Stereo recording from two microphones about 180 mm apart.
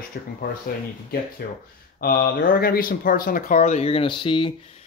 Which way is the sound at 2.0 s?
55° left (ahead or behind).